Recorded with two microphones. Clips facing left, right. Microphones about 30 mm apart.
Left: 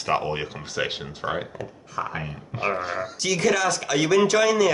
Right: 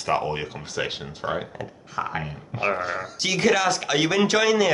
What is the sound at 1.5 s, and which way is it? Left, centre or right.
Speech, centre.